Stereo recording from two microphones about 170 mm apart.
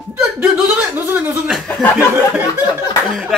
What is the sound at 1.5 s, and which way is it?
A man's voice, centre (ahead or behind).